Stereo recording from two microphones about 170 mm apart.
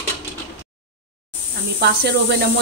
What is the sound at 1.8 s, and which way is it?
Speech, 75° right (ahead or behind).